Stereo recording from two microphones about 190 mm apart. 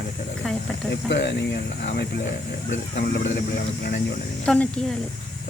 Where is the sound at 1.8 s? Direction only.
60° left (ahead or behind).